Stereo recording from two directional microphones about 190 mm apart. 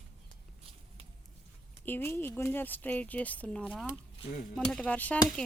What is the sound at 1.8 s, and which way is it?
Speech, 10° left (ahead or behind).